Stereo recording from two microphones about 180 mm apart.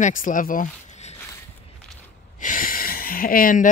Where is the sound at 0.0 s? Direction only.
50° left (ahead or behind).